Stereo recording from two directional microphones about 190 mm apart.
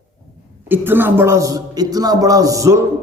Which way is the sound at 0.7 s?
10° right (ahead or behind).